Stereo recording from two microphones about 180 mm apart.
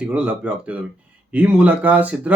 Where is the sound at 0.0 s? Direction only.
5° right (ahead or behind).